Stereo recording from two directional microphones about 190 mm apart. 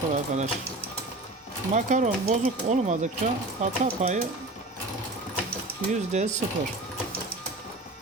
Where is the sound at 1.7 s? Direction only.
40° right (ahead or behind).